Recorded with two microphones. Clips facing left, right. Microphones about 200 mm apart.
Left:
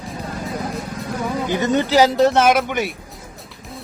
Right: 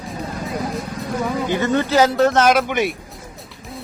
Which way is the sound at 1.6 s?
15° left (ahead or behind).